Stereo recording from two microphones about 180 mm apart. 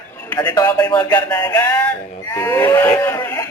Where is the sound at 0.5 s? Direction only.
20° left (ahead or behind).